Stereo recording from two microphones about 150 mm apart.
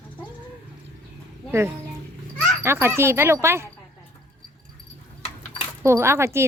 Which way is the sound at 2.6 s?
15° right (ahead or behind).